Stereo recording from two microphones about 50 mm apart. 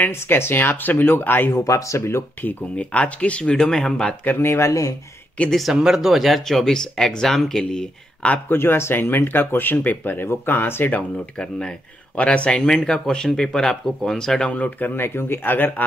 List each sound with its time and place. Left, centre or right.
0.1 s speech: left
1.5 s speech: left
2.8 s speech: left
4.4 s speech: left
5.7 s speech: centre
8.5 s speech: left
11.3 s speech: centre
14.5 s speech: left
15.0 s speech: left